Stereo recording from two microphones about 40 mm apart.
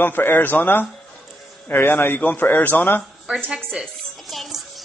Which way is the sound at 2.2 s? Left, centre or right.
Left.